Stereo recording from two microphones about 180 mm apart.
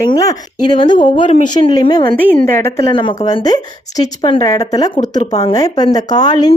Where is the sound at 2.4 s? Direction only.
15° left (ahead or behind).